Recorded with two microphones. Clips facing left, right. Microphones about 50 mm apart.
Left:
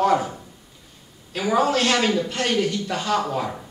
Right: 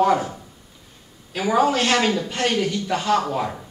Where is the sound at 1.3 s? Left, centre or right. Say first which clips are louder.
Right 1 dB; centre.